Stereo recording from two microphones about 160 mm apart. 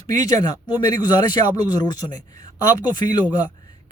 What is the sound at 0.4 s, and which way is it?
Speech, 25° left (ahead or behind).